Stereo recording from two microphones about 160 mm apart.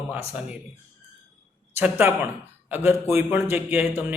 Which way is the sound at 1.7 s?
10° right (ahead or behind).